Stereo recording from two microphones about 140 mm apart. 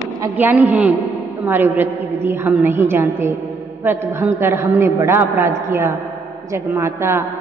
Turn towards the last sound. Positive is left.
turn(degrees=-20)  # may be behind; listen again after turning